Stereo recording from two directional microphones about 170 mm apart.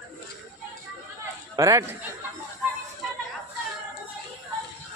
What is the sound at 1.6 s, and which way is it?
Speech, 20° right (ahead or behind).